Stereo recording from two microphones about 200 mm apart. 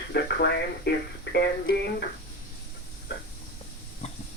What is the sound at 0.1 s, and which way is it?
Speech, 55° left (ahead or behind).